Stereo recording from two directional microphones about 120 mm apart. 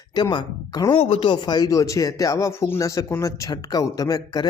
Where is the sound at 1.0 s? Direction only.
50° left (ahead or behind).